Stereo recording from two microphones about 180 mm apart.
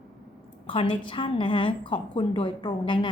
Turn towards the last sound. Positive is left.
turn(degrees=25)  # may be behind; listen again after turning